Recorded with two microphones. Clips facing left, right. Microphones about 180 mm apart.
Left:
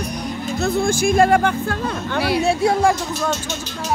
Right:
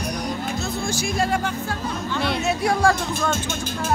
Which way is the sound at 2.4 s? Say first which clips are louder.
Left 3 dB; 25° left (ahead or behind).